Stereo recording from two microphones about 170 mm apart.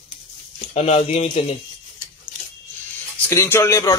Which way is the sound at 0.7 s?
35° left (ahead or behind).